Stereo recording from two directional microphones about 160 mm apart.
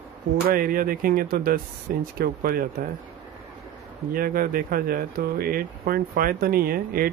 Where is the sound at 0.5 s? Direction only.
60° right (ahead or behind).